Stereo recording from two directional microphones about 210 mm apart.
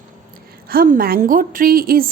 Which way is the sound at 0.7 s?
45° right (ahead or behind).